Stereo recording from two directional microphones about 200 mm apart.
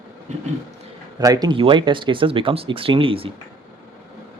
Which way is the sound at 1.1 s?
20° right (ahead or behind).